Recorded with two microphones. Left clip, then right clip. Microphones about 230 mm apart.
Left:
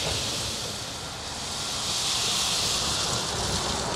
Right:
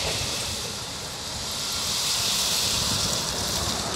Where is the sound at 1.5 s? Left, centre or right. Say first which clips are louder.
Right 2 dB; right.